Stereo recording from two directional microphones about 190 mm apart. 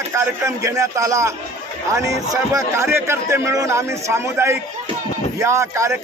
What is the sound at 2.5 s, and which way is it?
Speech, 15° right (ahead or behind).